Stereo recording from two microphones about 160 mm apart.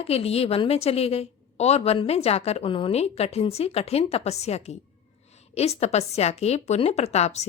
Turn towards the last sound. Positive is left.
turn(degrees=45)  # may be behind; listen again after turning